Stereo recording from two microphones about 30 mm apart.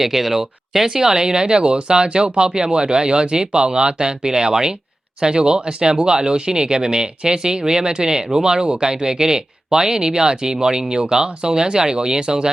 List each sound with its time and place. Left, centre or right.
0.0 s speech: centre
1.0 s speech: right